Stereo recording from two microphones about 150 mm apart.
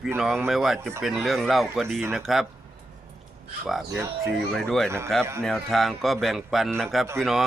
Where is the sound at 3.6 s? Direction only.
Centre (ahead or behind).